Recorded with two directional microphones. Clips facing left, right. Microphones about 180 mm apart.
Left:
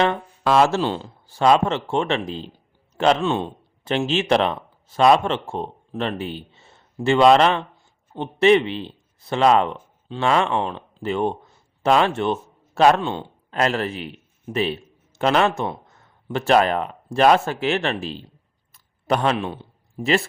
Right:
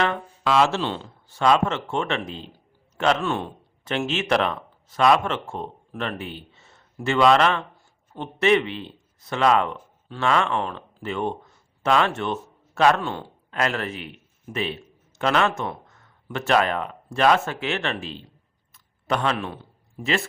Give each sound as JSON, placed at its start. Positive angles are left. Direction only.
{"t": 0.4, "sound": "a man's voice", "side_deg": 45}
{"t": 18.7, "sound": "a sound", "side_deg": 35}
{"t": 20.0, "sound": "speech", "side_deg": 35}